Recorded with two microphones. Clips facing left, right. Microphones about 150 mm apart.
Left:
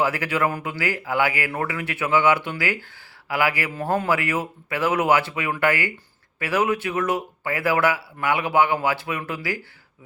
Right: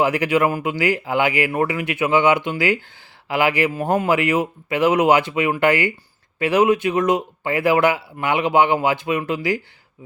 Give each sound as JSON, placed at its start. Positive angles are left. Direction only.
{"t": 0.0, "sound": "speech", "side_deg": -20}